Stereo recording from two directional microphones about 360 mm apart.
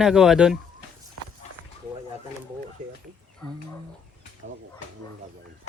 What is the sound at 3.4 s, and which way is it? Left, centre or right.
Speech, centre.